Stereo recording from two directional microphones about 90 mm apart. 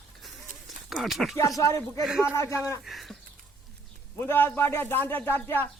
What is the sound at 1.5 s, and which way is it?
Speech, 35° left (ahead or behind).